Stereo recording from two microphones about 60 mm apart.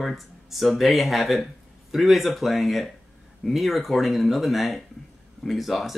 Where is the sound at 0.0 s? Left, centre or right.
Centre.